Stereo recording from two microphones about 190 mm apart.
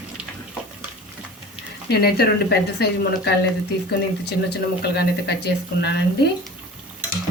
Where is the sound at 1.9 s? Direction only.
55° left (ahead or behind).